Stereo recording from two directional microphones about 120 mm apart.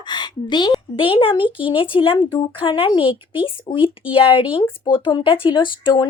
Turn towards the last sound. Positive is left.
turn(degrees=40)  # may be behind; listen again after turning